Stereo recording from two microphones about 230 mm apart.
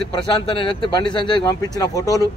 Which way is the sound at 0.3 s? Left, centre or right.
Left.